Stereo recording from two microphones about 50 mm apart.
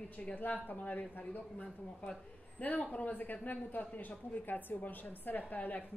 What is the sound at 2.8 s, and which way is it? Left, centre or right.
Speech, left.